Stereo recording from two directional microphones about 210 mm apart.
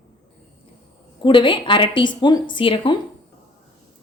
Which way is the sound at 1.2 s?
25° left (ahead or behind).